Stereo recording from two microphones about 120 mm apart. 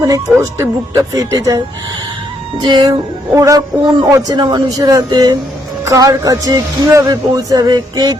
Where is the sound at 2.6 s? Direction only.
35° right (ahead or behind).